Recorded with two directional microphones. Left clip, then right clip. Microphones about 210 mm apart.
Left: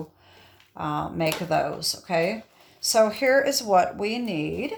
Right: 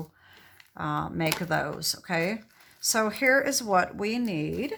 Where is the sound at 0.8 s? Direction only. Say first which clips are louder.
Left 3 dB; 25° right (ahead or behind).